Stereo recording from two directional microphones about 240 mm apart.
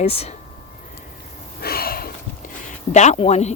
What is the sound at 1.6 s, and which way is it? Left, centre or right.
Sniff, left.